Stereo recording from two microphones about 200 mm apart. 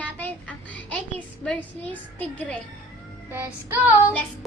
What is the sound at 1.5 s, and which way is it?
A woman's voice, 10° left (ahead or behind).